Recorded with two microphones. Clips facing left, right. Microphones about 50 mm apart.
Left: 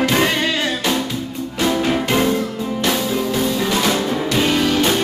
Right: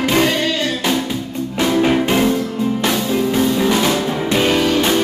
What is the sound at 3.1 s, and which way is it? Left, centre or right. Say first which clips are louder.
Music: right 3 dB; centre.